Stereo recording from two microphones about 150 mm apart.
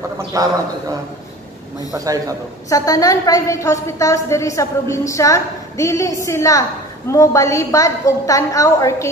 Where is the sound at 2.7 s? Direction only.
25° left (ahead or behind).